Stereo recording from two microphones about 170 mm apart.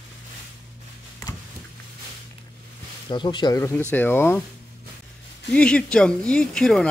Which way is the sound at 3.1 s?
25° left (ahead or behind).